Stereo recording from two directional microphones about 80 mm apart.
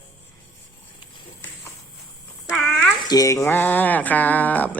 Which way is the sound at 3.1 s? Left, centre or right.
Left.